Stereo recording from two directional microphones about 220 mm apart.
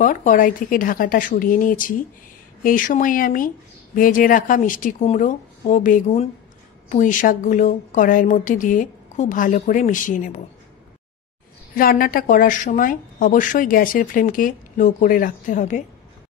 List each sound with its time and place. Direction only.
0.0 s speech: 35° left (ahead or behind)
11.7 s speech: 40° left (ahead or behind)